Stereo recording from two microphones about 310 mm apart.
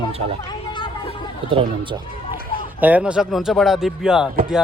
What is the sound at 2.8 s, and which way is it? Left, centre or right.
Speech, centre.